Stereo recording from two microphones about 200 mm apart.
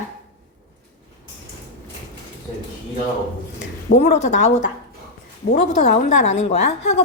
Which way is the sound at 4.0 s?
35° left (ahead or behind).